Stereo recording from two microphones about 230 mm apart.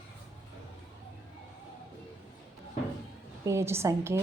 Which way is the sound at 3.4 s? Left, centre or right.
Centre.